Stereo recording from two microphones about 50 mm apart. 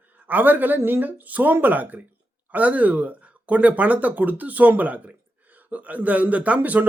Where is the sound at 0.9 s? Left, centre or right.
Right.